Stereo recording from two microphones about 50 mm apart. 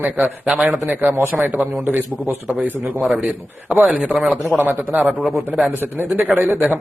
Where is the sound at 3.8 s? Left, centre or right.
Right.